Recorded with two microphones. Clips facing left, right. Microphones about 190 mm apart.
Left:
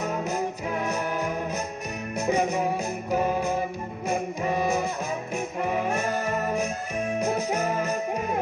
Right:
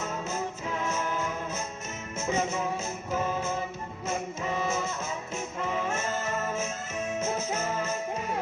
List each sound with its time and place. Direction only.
0.0 s music: 15° left (ahead or behind)